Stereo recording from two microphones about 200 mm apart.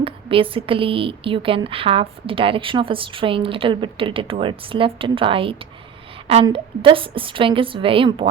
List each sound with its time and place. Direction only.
0.0 s a woman's voice: 25° right (ahead or behind)